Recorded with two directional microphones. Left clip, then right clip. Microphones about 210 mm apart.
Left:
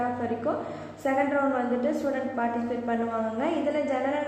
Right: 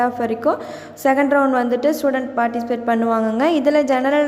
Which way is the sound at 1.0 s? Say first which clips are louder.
Right 10 dB; 45° right (ahead or behind).